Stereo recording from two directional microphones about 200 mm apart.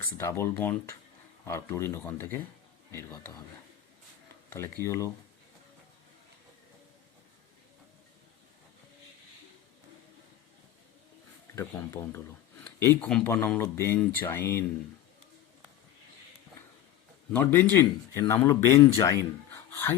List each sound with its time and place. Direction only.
0.2 s speech: 15° left (ahead or behind)
4.4 s a sound: 10° left (ahead or behind)
4.8 s speech: 15° left (ahead or behind)
11.5 s speech: 15° left (ahead or behind)
17.3 s speech: 10° left (ahead or behind)
19.5 s a sound: 10° left (ahead or behind)